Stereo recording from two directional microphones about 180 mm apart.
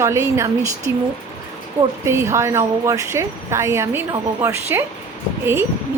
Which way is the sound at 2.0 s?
15° right (ahead or behind).